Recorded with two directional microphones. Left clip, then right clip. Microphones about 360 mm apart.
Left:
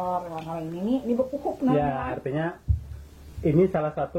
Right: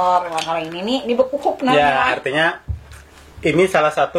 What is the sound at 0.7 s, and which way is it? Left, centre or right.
Speech, right.